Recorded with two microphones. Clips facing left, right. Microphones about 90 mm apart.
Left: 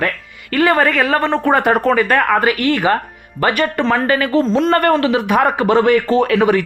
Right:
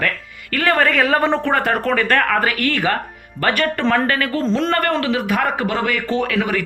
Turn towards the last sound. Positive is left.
turn(degrees=30)  # may be behind; listen again after turning